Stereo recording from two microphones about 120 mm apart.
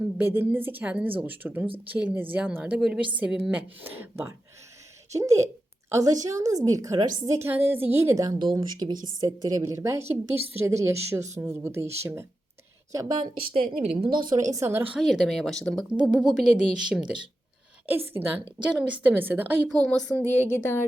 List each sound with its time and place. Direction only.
0.0 s speech: 20° right (ahead or behind)
1.6 s a woman's voice: 50° right (ahead or behind)
1.9 s speech: 10° right (ahead or behind); by 7.1 s 30° right (ahead or behind)
7.3 s speech: 20° right (ahead or behind)
8.2 s speech: 35° right (ahead or behind)
13.8 s a woman's voice: 50° right (ahead or behind)
14.3 s speech: 25° right (ahead or behind)
14.9 s speech: centre (ahead or behind)
16.0 s speech: 5° right (ahead or behind)
17.8 s speech: 15° right (ahead or behind)
19.6 s speech: 5° left (ahead or behind); by 20.8 s 20° left (ahead or behind)